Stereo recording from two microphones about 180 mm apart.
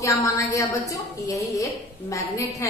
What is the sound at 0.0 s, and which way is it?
A woman's voice, 15° left (ahead or behind).